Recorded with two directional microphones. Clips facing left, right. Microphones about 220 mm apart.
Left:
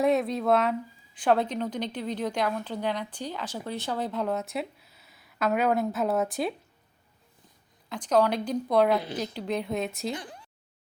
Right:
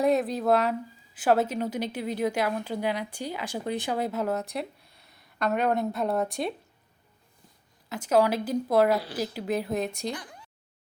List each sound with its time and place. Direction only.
0.0 s a woman's voice: centre (ahead or behind)
7.9 s a woman's voice: 10° right (ahead or behind)
10.1 s speech: 25° left (ahead or behind)